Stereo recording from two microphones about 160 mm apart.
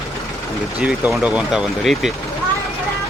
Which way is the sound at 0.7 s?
5° right (ahead or behind).